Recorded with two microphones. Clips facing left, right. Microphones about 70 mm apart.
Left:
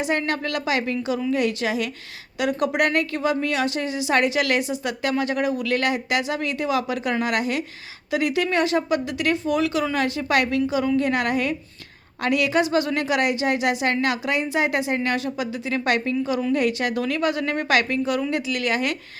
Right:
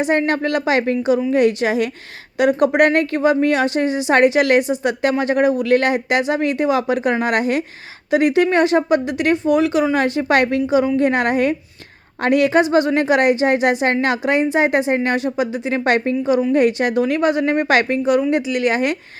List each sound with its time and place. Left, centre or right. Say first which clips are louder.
0.0 s a woman's voice: right 6 dB; right